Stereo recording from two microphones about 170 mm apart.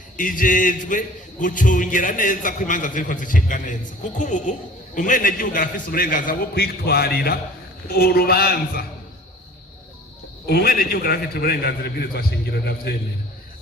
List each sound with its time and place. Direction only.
0.2 s a man's voice: 50° left (ahead or behind)
10.4 s a man's voice: 65° left (ahead or behind)